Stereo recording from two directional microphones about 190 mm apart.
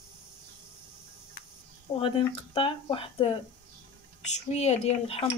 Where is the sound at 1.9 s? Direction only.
25° left (ahead or behind).